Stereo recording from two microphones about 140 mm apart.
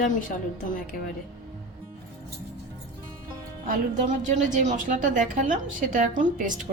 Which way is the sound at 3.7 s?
65° right (ahead or behind).